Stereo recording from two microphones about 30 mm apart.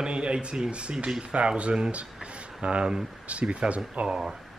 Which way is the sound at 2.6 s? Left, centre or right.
Right.